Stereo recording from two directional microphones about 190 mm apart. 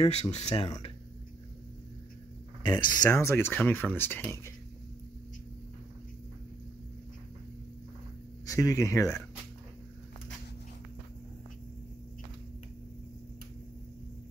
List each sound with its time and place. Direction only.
0.0 s speech: 35° left (ahead or behind)
2.6 s speech: 15° left (ahead or behind)
8.5 s speech: 20° left (ahead or behind)